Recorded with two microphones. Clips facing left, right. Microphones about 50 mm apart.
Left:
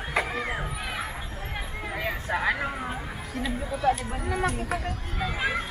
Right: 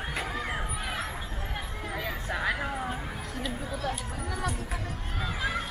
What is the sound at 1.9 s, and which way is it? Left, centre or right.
Vehicle, left.